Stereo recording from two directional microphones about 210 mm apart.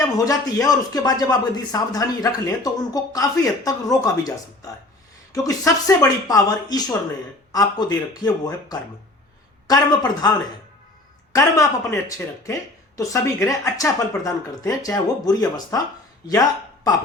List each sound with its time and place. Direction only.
0.3 s speech: 15° left (ahead or behind)